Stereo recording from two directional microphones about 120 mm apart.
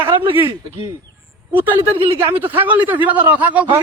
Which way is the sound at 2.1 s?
15° right (ahead or behind).